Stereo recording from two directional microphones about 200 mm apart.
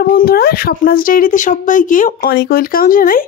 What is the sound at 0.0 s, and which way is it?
Speech, 50° left (ahead or behind).